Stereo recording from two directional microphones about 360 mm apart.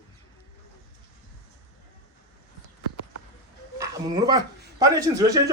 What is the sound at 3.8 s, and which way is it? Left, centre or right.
Speech, centre.